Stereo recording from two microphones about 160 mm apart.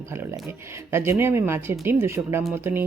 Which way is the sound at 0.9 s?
15° right (ahead or behind).